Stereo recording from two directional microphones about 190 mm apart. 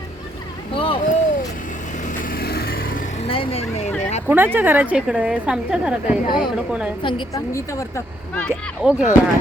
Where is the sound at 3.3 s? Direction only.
30° left (ahead or behind).